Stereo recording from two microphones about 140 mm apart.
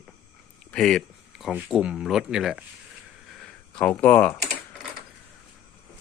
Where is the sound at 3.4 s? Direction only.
5° left (ahead or behind).